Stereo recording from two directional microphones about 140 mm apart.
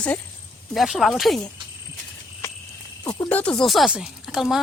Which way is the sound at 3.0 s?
30° left (ahead or behind).